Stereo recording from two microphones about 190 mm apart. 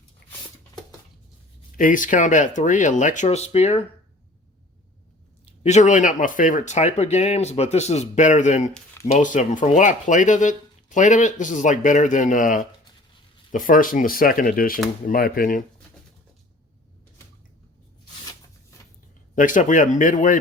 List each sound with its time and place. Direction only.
0.2 s a sound: 55° left (ahead or behind)
1.7 s speech: 45° left (ahead or behind)
5.5 s speech: 35° left (ahead or behind)
19.4 s speech: 45° left (ahead or behind)